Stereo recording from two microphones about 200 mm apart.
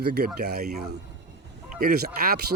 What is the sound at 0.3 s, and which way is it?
Speech, 50° right (ahead or behind).